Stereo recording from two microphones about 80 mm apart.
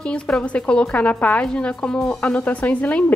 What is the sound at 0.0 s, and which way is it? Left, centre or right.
A woman's voice, centre.